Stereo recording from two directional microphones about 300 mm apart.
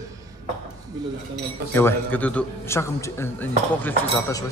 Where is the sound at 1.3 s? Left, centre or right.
Centre.